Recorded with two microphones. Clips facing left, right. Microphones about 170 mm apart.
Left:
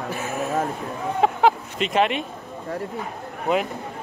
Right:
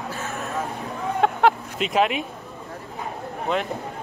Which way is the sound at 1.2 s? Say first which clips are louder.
Left 1 dB; centre (ahead or behind).